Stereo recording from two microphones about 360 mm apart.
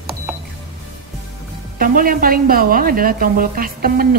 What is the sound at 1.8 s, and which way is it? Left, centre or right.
A woman's voice, right.